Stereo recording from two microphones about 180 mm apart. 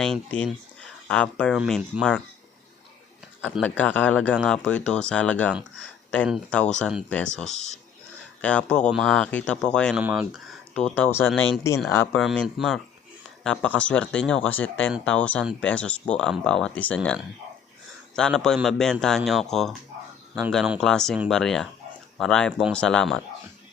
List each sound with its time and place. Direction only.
0.0 s speech: 5° left (ahead or behind)
3.6 s speech: 10° left (ahead or behind)
5.8 s a sound: 10° left (ahead or behind)
6.2 s speech: centre (ahead or behind)
7.5 s speech: 40° left (ahead or behind)
8.4 s speech: 5° left (ahead or behind)
10.0 s speech: 10° right (ahead or behind)
10.8 s speech: 10° left (ahead or behind)
12.2 s speech: centre (ahead or behind)